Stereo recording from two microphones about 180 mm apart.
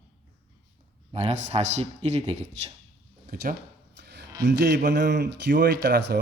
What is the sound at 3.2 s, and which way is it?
Speech, 55° right (ahead or behind).